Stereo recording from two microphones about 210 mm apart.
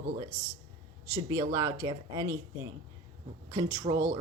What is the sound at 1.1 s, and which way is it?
A woman's voice, 15° right (ahead or behind).